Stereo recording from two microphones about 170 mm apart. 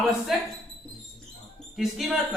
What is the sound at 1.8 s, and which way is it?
Speech, centre (ahead or behind).